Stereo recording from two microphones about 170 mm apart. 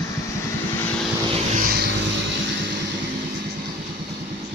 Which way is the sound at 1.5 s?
60° right (ahead or behind).